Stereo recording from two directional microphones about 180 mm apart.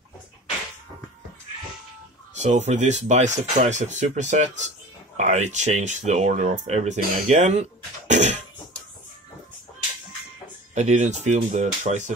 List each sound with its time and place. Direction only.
2.3 s speech: 40° right (ahead or behind)
8.1 s music: 40° right (ahead or behind)
10.7 s speech: 40° right (ahead or behind)